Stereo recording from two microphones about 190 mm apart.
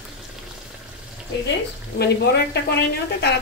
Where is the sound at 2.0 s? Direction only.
60° left (ahead or behind).